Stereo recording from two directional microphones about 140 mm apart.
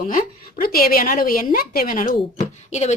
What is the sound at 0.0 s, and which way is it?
A woman's voice, 70° left (ahead or behind).